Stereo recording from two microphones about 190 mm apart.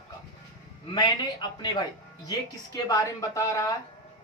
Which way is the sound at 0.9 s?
20° left (ahead or behind).